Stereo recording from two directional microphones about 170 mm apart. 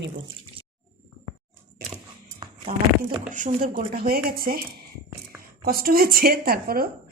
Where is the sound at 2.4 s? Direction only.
25° right (ahead or behind).